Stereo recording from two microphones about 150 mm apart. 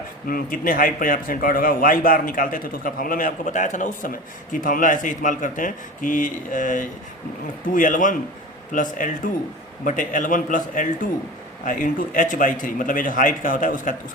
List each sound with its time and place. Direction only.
0.3 s a man's voice: 75° left (ahead or behind)